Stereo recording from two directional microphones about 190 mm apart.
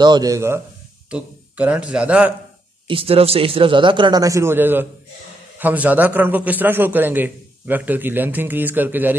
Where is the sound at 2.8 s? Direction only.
30° right (ahead or behind).